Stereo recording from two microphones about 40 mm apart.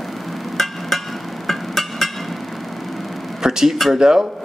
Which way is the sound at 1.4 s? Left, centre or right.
Centre.